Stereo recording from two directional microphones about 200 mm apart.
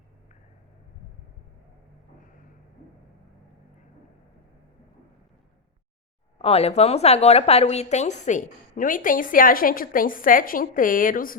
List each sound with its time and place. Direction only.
6.4 s a woman's voice: 30° left (ahead or behind)